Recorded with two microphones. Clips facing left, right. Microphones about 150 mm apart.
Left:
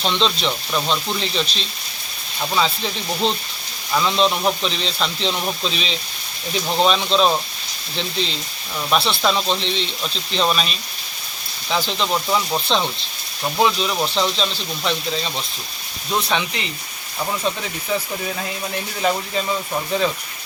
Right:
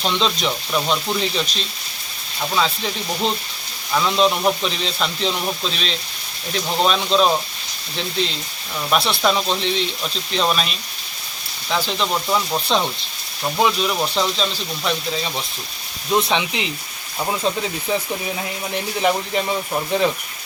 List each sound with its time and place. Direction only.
0.0 s speech: 5° right (ahead or behind)
16.1 s speech: 20° right (ahead or behind)